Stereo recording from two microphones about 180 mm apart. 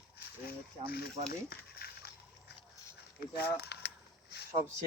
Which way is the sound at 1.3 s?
60° left (ahead or behind).